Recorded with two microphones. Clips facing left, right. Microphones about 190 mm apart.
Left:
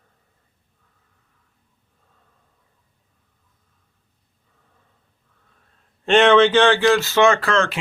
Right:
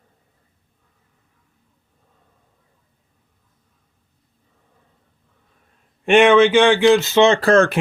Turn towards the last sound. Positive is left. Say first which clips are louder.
# right 7 dB
turn(degrees=-45)  # may be behind; listen again after turning